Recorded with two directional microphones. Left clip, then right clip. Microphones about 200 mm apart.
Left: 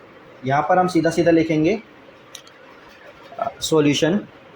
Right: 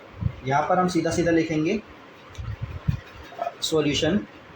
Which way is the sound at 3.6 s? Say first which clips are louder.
Left 5 dB; 45° left (ahead or behind).